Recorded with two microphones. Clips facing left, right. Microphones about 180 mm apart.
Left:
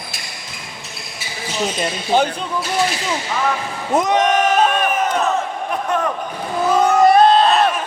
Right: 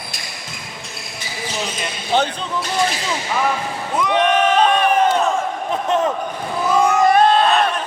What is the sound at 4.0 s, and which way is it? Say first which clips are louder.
Speech: left 1 dB; 45° left (ahead or behind).